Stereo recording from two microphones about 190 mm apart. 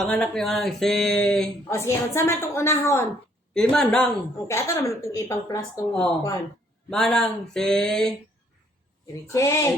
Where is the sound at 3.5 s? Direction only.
5° left (ahead or behind).